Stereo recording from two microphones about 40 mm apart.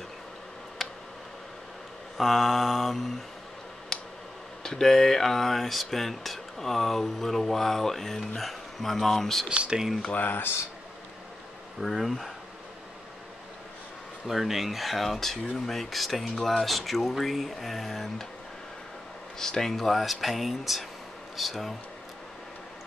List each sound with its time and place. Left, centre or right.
0.8 s tick: centre
2.1 s speech: centre
3.9 s tick: centre
4.6 s speech: centre
9.5 s speech: right
10.1 s speech: left
11.8 s speech: centre
14.2 s speech: centre
19.3 s speech: centre